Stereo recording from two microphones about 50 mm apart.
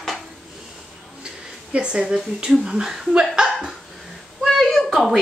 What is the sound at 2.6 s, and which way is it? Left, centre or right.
Speech, centre.